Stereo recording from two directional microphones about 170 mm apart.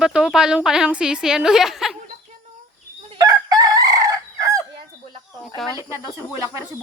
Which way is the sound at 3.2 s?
20° right (ahead or behind).